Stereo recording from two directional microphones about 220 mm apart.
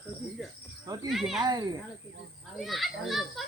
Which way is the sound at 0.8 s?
15° right (ahead or behind).